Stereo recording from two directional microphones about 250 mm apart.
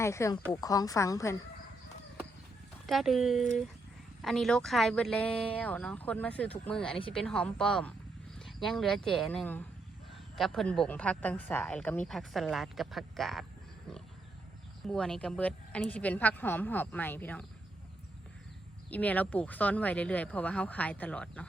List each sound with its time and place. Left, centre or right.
0.0 s speech: centre
2.8 s speech: centre
14.8 s speech: centre
18.9 s speech: centre